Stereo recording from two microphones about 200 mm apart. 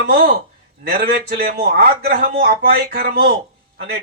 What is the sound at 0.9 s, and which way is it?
Speech, 50° right (ahead or behind).